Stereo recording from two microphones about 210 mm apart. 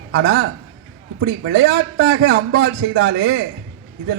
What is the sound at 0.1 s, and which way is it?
Speech, 90° right.